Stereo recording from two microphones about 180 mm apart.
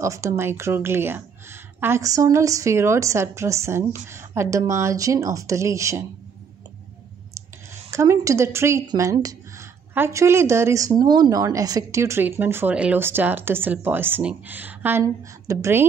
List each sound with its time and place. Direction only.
0.0 s speech: 15° right (ahead or behind)
7.9 s speech: 15° right (ahead or behind)